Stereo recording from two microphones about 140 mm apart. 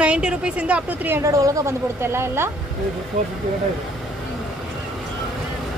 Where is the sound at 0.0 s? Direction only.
5° right (ahead or behind).